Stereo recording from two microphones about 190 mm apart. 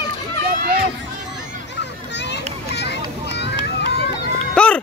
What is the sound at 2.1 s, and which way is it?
Children playing, 65° left (ahead or behind).